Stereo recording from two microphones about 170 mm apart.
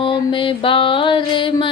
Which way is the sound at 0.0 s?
30° left (ahead or behind).